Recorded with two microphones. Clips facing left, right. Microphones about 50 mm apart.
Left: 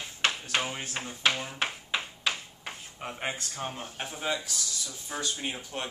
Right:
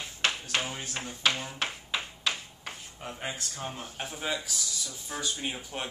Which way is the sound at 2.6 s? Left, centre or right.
Left.